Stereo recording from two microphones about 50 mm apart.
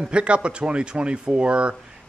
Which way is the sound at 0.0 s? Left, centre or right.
Right.